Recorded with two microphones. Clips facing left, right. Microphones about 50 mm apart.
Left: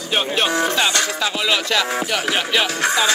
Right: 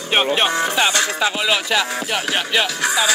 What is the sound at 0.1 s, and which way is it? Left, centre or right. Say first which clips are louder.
Speech: right 2 dB; right.